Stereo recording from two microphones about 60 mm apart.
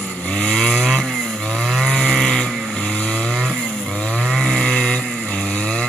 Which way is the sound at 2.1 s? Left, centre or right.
Centre.